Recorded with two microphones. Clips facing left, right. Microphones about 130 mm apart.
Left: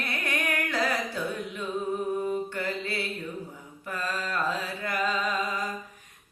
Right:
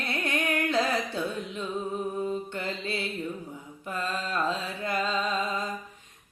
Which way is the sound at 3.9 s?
20° right (ahead or behind).